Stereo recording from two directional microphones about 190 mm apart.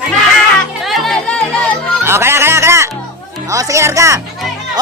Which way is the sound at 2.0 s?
15° right (ahead or behind).